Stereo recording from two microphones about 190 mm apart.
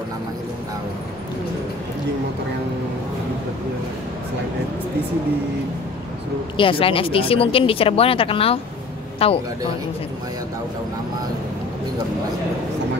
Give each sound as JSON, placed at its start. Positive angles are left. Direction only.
{"t": 6.5, "sound": "a man's voice", "side_deg": 25}